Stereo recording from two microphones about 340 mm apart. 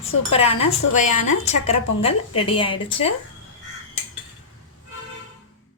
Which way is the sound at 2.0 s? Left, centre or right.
Centre.